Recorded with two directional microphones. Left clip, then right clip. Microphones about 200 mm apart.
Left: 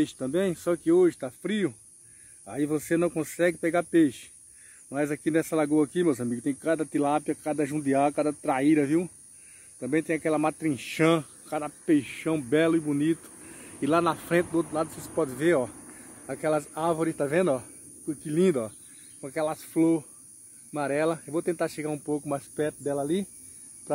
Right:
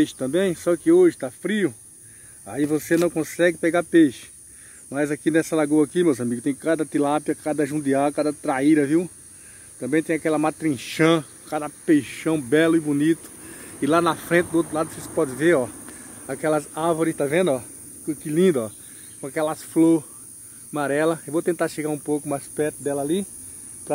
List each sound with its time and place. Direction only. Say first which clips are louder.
0.0 s speech: right 6 dB; centre (ahead or behind)